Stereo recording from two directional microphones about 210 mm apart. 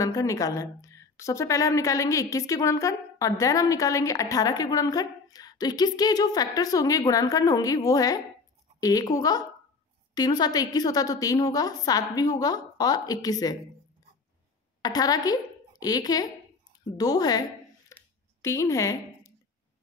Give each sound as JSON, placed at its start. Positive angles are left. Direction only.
{"t": 0.0, "sound": "a woman's voice", "side_deg": 15}
{"t": 14.8, "sound": "speech", "side_deg": 20}
{"t": 16.9, "sound": "a sound", "side_deg": 20}